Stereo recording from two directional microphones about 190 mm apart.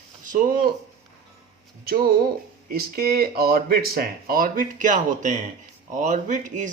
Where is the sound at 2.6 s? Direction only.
50° right (ahead or behind).